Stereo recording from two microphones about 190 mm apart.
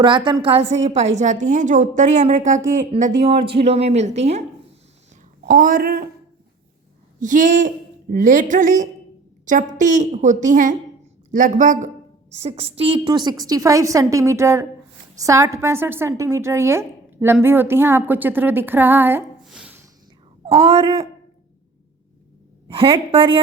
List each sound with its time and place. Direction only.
0.0 s a woman's voice: 25° right (ahead or behind)
0.6 s a woman's voice: 75° right (ahead or behind)
1.1 s a woman's voice: 40° right (ahead or behind)
2.9 s a woman's voice: 30° right (ahead or behind)
5.5 s a woman's voice: 45° right (ahead or behind)
7.2 s a woman's voice: 40° right (ahead or behind); by 19.2 s 10° right (ahead or behind)
19.5 s a sound: 5° right (ahead or behind)
20.5 s a woman's voice: 30° right (ahead or behind)
22.7 s a woman's voice: 25° right (ahead or behind)